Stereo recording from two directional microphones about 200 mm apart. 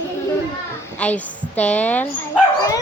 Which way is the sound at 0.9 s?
5° left (ahead or behind).